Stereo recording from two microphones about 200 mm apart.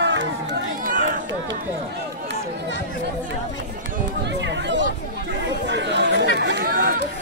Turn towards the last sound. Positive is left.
turn(degrees=-50)  # may be behind; listen again after turning